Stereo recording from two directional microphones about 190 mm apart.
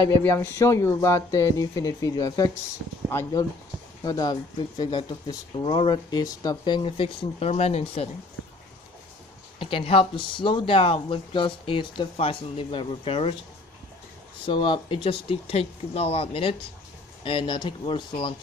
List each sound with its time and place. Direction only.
0.2 s speech: 10° left (ahead or behind); by 8.1 s 30° left (ahead or behind)
9.6 s speech: 25° left (ahead or behind)
14.4 s speech: 25° left (ahead or behind)